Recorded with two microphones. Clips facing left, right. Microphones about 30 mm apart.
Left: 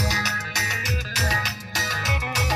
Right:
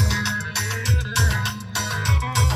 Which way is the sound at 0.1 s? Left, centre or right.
Left.